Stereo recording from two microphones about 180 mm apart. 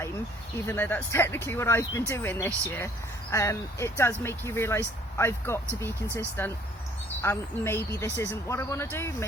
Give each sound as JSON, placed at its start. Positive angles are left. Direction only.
{"t": 0.7, "sound": "speech", "side_deg": 10}